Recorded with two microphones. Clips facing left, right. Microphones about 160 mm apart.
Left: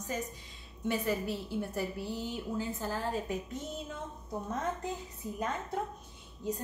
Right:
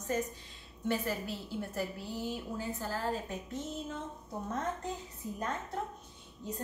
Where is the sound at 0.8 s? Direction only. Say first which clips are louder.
Left 2 dB; 15° left (ahead or behind).